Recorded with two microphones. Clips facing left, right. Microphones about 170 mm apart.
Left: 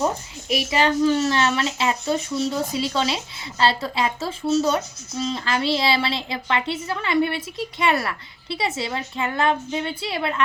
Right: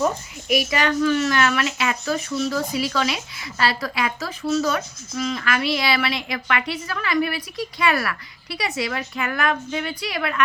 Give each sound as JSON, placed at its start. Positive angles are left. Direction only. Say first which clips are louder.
{"t": 0.0, "sound": "a child's voice", "louder": "right 1 dB", "side_deg": 30}